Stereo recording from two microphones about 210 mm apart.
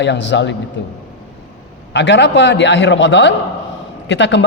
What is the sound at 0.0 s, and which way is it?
Speech, 60° left (ahead or behind).